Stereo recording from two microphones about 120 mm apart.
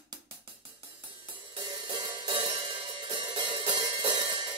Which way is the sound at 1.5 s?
40° right (ahead or behind).